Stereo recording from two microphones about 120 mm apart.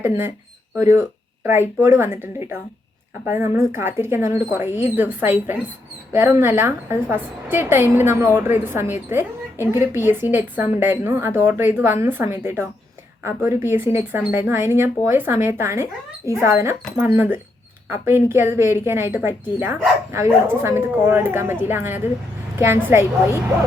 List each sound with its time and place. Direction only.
0.0 s a woman's voice: 20° right (ahead or behind)